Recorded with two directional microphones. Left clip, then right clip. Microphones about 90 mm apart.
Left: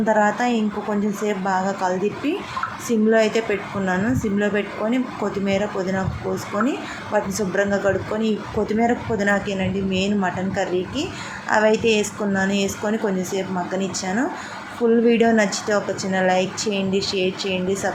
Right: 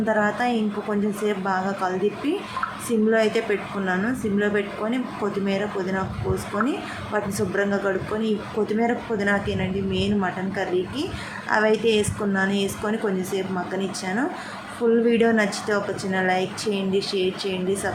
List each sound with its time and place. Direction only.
0.0 s speech: 25° left (ahead or behind)